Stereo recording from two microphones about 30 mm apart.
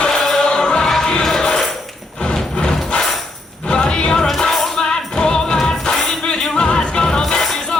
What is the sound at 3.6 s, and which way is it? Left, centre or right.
Music, left.